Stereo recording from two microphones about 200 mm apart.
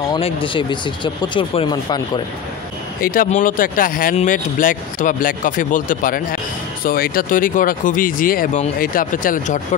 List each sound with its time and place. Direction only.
0.1 s speech: 25° left (ahead or behind)
3.0 s speech: 45° left (ahead or behind)